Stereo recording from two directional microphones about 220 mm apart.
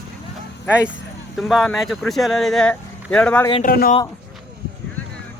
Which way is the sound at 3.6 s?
40° left (ahead or behind).